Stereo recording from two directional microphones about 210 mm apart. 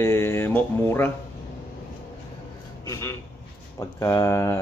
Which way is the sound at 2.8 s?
15° left (ahead or behind).